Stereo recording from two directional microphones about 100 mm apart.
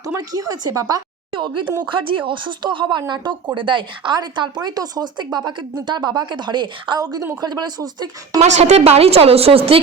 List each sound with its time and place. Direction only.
0.0 s speech: 35° right (ahead or behind)
1.8 s speech: 55° right (ahead or behind)
8.4 s speech: 90° right; by 9.8 s 70° right (ahead or behind)